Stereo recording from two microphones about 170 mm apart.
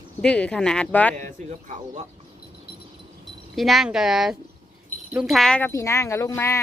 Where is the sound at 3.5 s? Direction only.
Centre (ahead or behind).